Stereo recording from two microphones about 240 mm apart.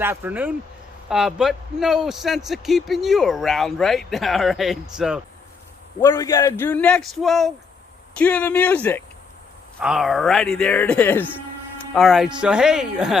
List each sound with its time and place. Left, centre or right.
0.0 s a man's voice: centre
6.0 s a man's voice: centre